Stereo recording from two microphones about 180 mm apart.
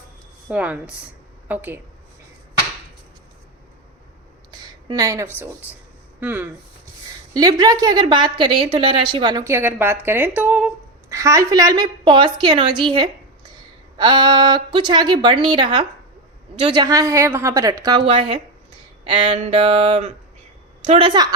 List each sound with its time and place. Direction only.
0.5 s a woman's voice: 10° right (ahead or behind)
4.9 s a woman's voice: 20° right (ahead or behind)
7.3 s a woman's voice: 20° right (ahead or behind)
19.0 s a sound: 30° right (ahead or behind)
20.8 s a woman's voice: 35° right (ahead or behind)